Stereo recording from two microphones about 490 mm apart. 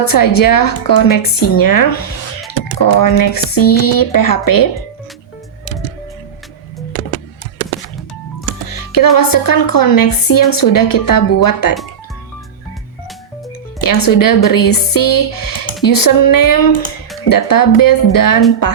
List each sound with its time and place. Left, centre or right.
0.0 s speech: left
8.7 s speech: left
13.8 s speech: left